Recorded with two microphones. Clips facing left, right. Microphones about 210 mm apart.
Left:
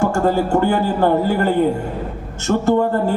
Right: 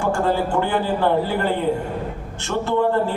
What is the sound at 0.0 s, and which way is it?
Speech, 45° left (ahead or behind).